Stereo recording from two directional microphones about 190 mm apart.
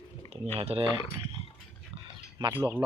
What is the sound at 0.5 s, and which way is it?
Speech, 30° right (ahead or behind).